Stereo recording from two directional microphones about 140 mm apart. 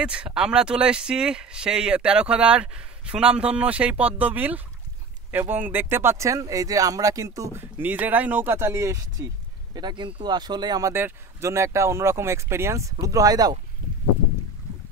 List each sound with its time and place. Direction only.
0.0 s speech: 5° right (ahead or behind); by 9.3 s 20° right (ahead or behind)
9.8 s speech: 30° right (ahead or behind)
10.9 s speech: 15° right (ahead or behind)